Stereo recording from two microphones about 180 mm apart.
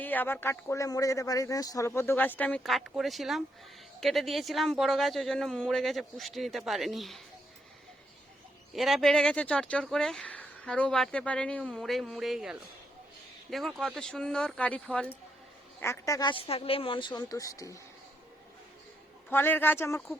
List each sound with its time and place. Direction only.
0.0 s speech: 10° left (ahead or behind)
8.7 s speech: centre (ahead or behind)
15.8 s speech: 15° left (ahead or behind)
19.3 s speech: 10° left (ahead or behind)